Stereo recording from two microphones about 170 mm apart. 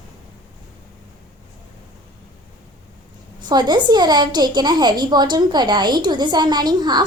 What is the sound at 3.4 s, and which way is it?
A woman's voice, 25° right (ahead or behind).